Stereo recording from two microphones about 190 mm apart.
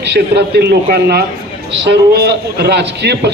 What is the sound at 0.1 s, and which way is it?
A man's voice, 60° right (ahead or behind).